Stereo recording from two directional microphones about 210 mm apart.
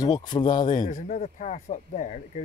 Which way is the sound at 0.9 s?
35° left (ahead or behind).